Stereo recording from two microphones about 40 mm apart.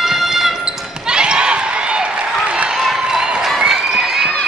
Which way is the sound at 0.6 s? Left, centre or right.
Right.